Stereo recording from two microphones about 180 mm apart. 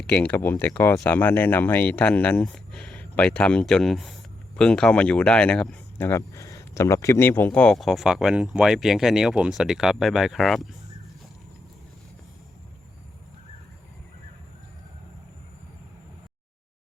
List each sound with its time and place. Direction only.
0.0 s speech: 5° left (ahead or behind)